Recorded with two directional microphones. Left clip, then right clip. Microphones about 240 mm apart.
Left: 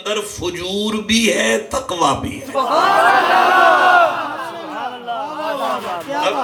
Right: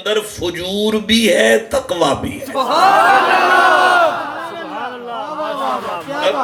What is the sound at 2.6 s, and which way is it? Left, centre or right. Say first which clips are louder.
Speech: right 2 dB; right.